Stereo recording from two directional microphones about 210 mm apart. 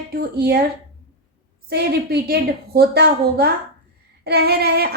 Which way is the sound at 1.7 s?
50° right (ahead or behind).